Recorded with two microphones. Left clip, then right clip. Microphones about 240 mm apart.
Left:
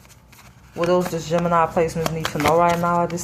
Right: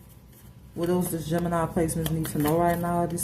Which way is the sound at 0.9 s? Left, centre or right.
Left.